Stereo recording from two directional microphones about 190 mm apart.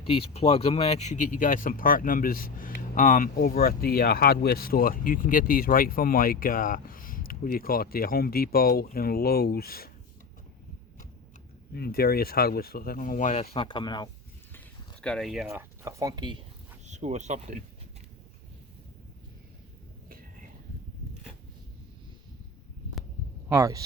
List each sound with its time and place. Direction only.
0.1 s speech: 30° left (ahead or behind); by 9.9 s 55° left (ahead or behind)
11.7 s speech: 55° left (ahead or behind); by 14.1 s 25° left (ahead or behind)
15.0 s speech: 5° left (ahead or behind)
15.8 s speech: 15° right (ahead or behind)
16.8 s speech: 40° right (ahead or behind)
23.5 s speech: 15° right (ahead or behind)